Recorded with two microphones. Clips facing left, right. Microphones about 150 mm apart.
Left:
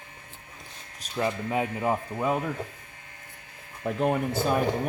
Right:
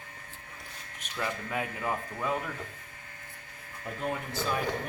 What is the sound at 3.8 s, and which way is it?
Speech, 75° left (ahead or behind).